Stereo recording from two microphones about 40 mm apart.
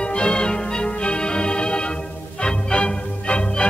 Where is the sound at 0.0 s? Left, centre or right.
Left.